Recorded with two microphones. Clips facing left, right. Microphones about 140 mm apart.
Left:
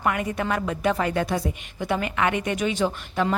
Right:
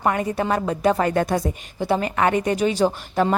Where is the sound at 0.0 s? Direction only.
35° right (ahead or behind).